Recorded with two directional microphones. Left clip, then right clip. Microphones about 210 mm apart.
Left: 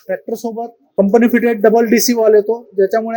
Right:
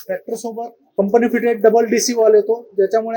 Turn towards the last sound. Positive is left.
turn(degrees=55)  # may be behind; listen again after turning